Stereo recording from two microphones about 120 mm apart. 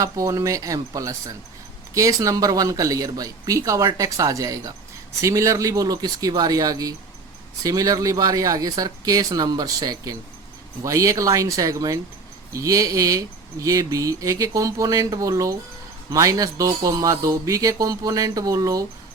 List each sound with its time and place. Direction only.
0.0 s speech: 25° right (ahead or behind)